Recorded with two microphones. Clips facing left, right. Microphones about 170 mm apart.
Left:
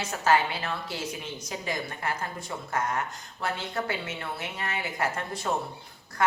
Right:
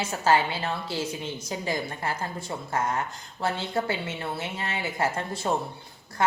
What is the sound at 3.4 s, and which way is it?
A woman's voice, 30° right (ahead or behind).